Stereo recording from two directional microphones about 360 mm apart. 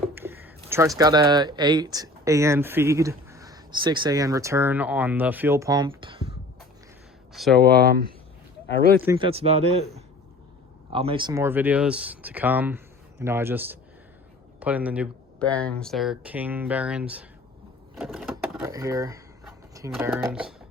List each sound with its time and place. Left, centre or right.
0.1 s speech: centre
7.3 s speech: centre
7.6 s speech: right
9.0 s speech: centre
10.9 s speech: centre
17.9 s a sound: centre